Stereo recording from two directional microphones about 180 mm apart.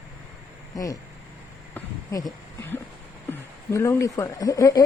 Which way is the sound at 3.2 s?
15° left (ahead or behind).